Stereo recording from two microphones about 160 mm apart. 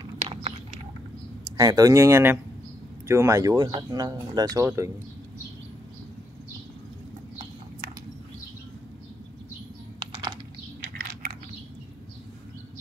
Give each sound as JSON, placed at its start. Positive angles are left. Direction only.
{"t": 0.3, "sound": "a sound", "side_deg": -40}
{"t": 1.6, "sound": "speech", "side_deg": -25}
{"t": 9.9, "sound": "computer keyboard", "side_deg": -30}